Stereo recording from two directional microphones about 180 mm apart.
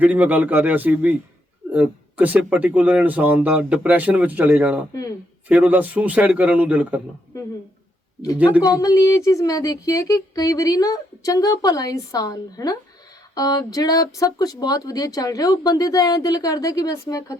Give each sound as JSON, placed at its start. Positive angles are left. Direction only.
{"t": 0.0, "sound": "speech", "side_deg": -10}
{"t": 8.4, "sound": "speech", "side_deg": -10}
{"t": 8.6, "sound": "speech", "side_deg": 20}